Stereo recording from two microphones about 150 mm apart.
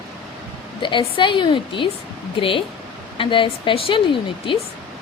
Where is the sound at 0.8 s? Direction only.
35° left (ahead or behind).